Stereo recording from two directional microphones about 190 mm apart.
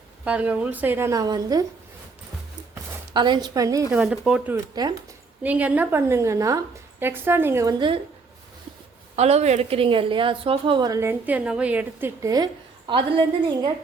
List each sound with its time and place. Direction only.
0.3 s a woman's voice: 5° right (ahead or behind)
3.1 s a woman's voice: 25° right (ahead or behind)
3.9 s speech: centre (ahead or behind)
4.7 s a woman's voice: 20° right (ahead or behind)
5.4 s a woman's voice: 5° right (ahead or behind); by 8.0 s 25° right (ahead or behind)
9.1 s a woman's voice: 35° right (ahead or behind)